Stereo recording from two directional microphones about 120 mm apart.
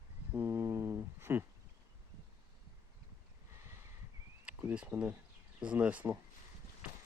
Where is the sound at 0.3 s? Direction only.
20° right (ahead or behind).